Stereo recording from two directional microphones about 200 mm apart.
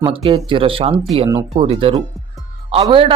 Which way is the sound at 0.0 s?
25° right (ahead or behind).